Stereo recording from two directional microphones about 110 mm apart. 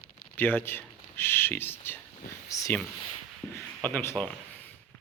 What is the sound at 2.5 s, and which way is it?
Speech, 30° left (ahead or behind).